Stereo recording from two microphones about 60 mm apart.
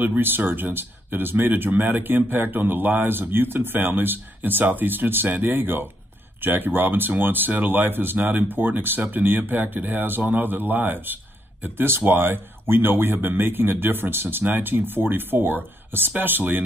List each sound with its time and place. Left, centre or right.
0.0 s speech: right